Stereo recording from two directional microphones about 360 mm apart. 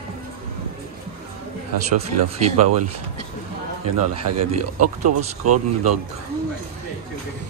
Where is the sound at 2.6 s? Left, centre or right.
Right.